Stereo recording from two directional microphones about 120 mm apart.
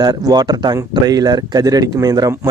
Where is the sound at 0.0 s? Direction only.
35° right (ahead or behind).